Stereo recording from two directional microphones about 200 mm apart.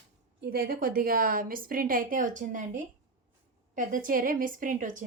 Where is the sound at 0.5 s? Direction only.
50° right (ahead or behind).